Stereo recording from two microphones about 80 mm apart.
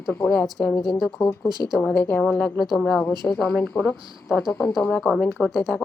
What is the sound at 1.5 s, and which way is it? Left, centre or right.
Speech, right.